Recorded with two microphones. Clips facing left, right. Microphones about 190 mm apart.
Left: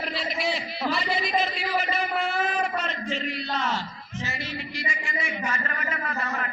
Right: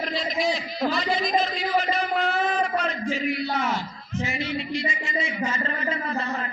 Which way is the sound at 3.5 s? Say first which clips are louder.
Right 2 dB; 15° right (ahead or behind).